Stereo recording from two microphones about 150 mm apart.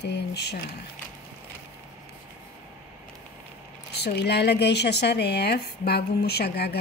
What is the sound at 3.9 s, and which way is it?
A woman's voice, 90° left.